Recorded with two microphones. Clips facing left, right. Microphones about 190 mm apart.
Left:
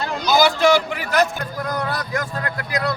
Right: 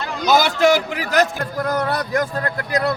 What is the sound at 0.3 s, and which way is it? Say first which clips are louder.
A man's voice: right 1 dB; 45° right (ahead or behind).